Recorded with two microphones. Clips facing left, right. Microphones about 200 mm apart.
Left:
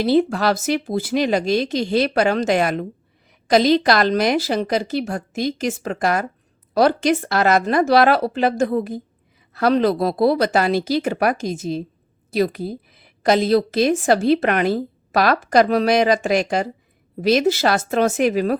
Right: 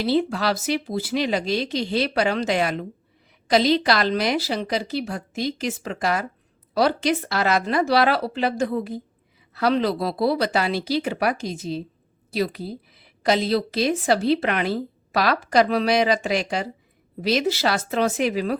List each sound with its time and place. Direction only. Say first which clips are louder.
0.0 s a woman's voice: left 5 dB; 50° left (ahead or behind)